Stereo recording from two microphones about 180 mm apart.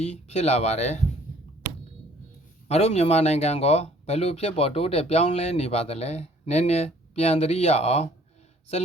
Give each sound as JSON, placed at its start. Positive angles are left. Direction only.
{"t": 0.0, "sound": "speech", "side_deg": 35}
{"t": 2.6, "sound": "speech", "side_deg": 35}